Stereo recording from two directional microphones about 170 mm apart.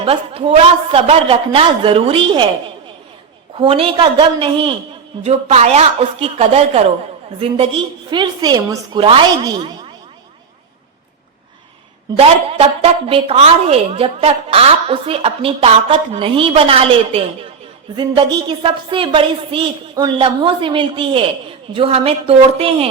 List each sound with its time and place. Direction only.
0.0 s a woman's voice: 35° right (ahead or behind)
3.6 s a woman's voice: 30° right (ahead or behind)
12.5 s a woman's voice: 35° right (ahead or behind)